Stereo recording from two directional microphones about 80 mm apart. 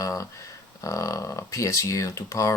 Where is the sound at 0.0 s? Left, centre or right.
Left.